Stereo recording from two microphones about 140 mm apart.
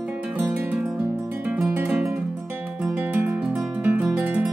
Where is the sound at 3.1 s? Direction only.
10° right (ahead or behind).